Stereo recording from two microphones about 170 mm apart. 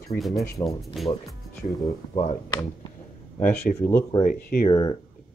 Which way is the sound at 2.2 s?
35° left (ahead or behind).